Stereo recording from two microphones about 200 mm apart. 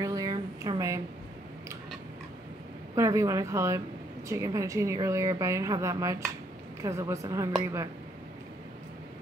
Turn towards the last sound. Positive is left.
turn(degrees=-15)  # may be behind; listen again after turning